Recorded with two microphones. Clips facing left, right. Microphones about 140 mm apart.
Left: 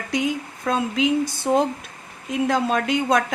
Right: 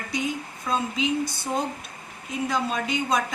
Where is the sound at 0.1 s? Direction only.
85° left.